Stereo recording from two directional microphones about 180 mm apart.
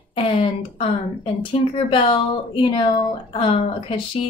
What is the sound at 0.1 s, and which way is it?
Speech, 30° left (ahead or behind).